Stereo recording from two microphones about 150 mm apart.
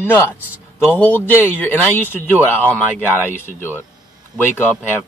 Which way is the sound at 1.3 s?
15° left (ahead or behind).